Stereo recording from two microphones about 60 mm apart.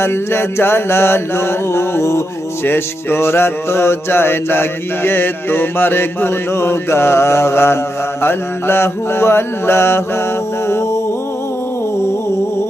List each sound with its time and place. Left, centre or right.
0.0 s mantra: left
2.6 s music: left
8.2 s mantra: left
10.7 s a sound: left